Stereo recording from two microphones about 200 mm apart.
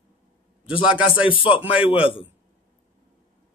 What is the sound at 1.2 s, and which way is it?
A man's voice, 25° left (ahead or behind).